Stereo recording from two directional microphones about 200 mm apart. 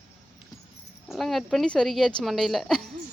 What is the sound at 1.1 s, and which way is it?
Speech, centre (ahead or behind).